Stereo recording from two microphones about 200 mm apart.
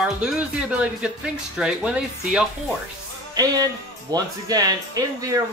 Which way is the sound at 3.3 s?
20° right (ahead or behind).